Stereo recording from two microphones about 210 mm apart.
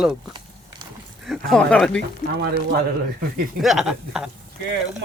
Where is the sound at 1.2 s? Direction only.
Centre (ahead or behind).